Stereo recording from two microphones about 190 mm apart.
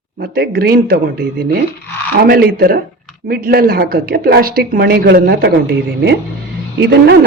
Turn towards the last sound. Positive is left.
turn(degrees=-60)  # may be behind; listen again after turning